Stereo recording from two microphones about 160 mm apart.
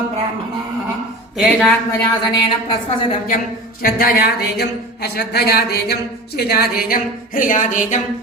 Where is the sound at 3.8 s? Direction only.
70° left (ahead or behind).